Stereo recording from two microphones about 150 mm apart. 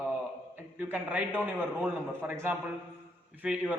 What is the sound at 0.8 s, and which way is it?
A man's voice, 10° right (ahead or behind).